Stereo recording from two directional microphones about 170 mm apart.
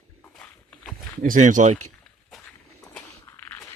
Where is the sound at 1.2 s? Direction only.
50° right (ahead or behind).